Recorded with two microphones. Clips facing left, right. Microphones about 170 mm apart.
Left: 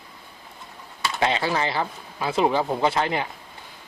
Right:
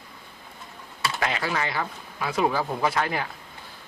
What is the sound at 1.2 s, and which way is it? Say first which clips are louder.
A man's voice: left 5 dB; 25° left (ahead or behind).